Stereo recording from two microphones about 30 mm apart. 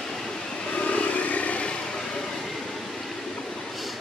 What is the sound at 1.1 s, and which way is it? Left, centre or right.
Vehicle, left.